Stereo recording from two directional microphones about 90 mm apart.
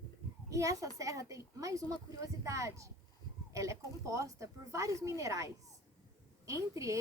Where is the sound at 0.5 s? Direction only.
35° right (ahead or behind).